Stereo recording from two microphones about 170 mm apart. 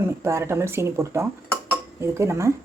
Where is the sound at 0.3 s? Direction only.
15° right (ahead or behind).